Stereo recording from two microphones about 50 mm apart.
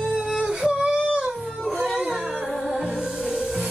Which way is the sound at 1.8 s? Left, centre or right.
Centre.